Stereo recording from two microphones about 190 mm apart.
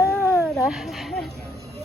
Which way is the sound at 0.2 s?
5° right (ahead or behind).